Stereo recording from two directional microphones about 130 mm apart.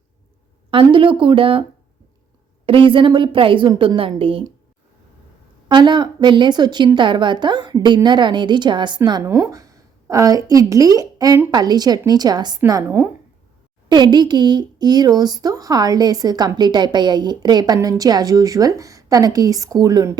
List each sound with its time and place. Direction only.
0.7 s speech: 40° right (ahead or behind)
2.6 s speech: 40° right (ahead or behind)
5.6 s speech: 35° right (ahead or behind)
9.2 s speech: 25° right (ahead or behind)
13.8 s a woman's voice: 35° right (ahead or behind)